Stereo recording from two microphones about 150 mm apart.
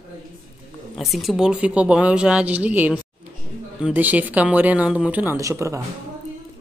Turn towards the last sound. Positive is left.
turn(degrees=-20)  # may be behind; listen again after turning